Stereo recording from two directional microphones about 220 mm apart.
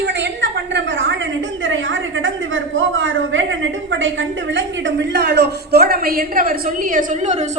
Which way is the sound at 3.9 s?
55° right (ahead or behind).